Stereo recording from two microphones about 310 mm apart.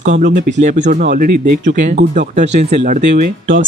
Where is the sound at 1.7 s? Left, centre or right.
Right.